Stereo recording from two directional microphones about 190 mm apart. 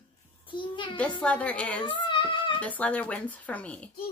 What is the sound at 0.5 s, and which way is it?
Speech, 25° left (ahead or behind).